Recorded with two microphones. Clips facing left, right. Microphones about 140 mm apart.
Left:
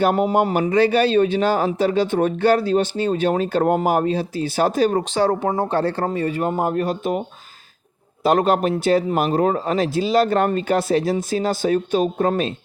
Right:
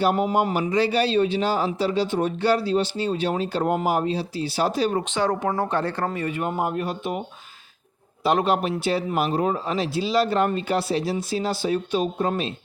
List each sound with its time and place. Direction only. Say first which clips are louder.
0.0 s speech: left 3 dB; 50° left (ahead or behind)
8.2 s speech: left 4 dB; 45° left (ahead or behind)